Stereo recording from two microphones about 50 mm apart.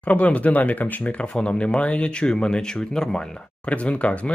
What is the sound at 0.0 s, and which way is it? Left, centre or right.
Speech, left.